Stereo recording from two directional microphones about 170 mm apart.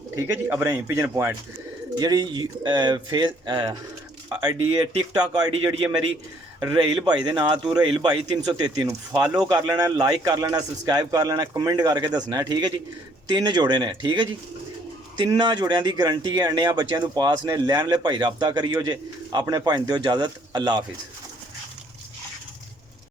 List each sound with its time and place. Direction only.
0.2 s a man's voice: 10° right (ahead or behind)
2.0 s speech: 25° right (ahead or behind)
4.3 s a man's voice: 15° right (ahead or behind)
5.4 s a man's voice: 35° right (ahead or behind)
6.6 s speech: 25° right (ahead or behind)